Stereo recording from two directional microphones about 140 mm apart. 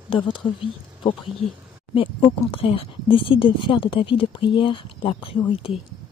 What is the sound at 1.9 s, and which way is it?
Speech, 40° left (ahead or behind).